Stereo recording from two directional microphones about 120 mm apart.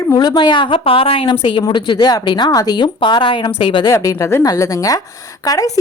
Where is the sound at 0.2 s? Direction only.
35° left (ahead or behind).